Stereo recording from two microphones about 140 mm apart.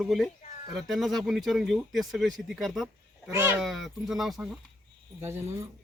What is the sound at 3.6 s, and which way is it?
Speech, centre (ahead or behind).